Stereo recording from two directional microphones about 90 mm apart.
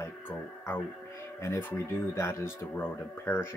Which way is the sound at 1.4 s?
30° left (ahead or behind).